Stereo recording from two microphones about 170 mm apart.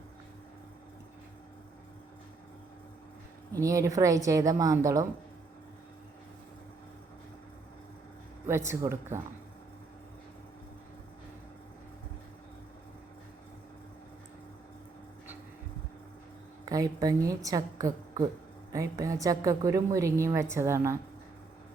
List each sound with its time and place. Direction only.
3.5 s a woman's voice: 20° right (ahead or behind)
8.4 s a woman's voice: 15° right (ahead or behind)
16.6 s a woman's voice: 20° right (ahead or behind)